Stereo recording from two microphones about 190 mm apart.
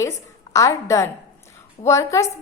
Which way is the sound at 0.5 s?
15° left (ahead or behind).